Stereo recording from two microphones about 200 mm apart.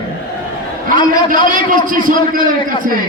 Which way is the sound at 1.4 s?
40° right (ahead or behind).